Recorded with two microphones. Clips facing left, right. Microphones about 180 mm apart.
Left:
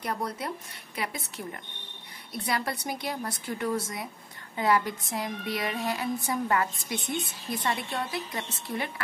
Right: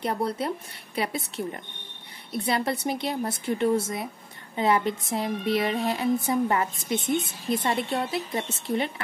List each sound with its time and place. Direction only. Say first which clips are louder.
0.0 s a woman's voice: right 5 dB; 30° right (ahead or behind)